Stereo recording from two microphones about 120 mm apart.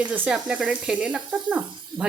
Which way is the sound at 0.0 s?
10° right (ahead or behind).